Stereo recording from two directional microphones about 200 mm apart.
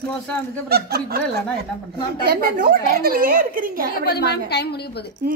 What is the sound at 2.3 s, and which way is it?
A woman's voice, 45° right (ahead or behind).